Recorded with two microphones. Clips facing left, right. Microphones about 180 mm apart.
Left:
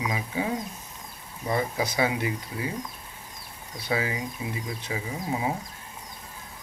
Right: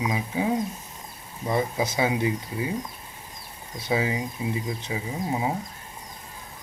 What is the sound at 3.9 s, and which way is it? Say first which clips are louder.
Speech: right 3 dB; 20° right (ahead or behind).